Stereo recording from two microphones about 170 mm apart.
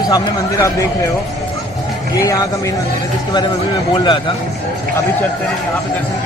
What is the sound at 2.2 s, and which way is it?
Speech, 20° left (ahead or behind).